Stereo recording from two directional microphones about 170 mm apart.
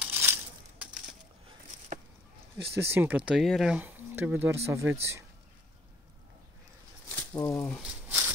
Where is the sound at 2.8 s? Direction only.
15° right (ahead or behind).